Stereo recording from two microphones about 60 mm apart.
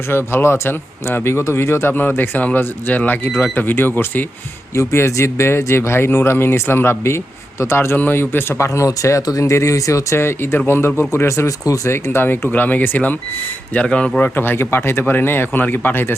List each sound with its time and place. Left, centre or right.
0.1 s speech: left
1.9 s speech: left
4.7 s speech: left
7.9 s speech: left
8.5 s speech: left
9.4 s speech: left
10.2 s speech: left
11.9 s speech: left
13.7 s speech: centre
14.2 s speech: left